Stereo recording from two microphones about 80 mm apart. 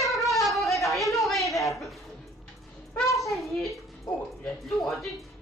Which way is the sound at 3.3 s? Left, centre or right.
Centre.